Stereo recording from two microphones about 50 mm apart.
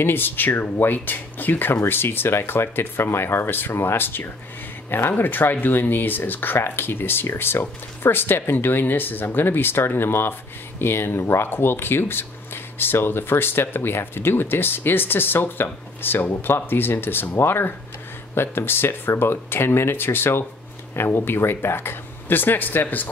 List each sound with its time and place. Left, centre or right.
0.0 s speech: left
5.1 s speech: left